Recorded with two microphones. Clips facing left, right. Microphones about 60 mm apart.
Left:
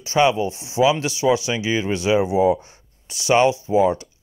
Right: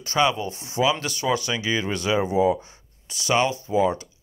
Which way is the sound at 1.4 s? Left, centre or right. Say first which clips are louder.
Left 3 dB; left.